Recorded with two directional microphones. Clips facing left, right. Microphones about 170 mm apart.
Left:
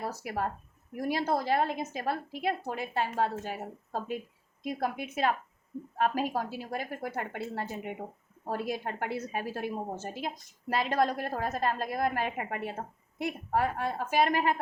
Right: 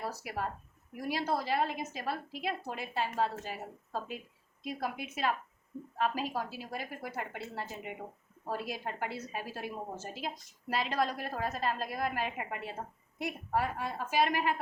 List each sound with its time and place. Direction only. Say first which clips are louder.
0.0 s a woman's voice: left 4 dB; 50° left (ahead or behind)